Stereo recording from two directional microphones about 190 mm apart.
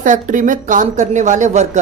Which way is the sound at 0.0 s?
45° right (ahead or behind).